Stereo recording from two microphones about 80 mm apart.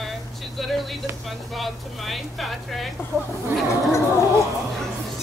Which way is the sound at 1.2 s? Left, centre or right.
Centre.